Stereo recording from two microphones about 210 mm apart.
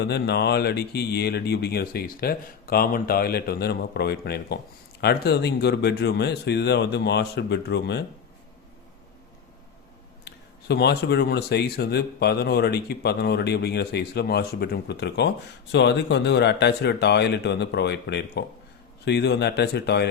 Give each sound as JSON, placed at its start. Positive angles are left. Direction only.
{"t": 0.0, "sound": "speech", "side_deg": 50}
{"t": 10.2, "sound": "speech", "side_deg": 55}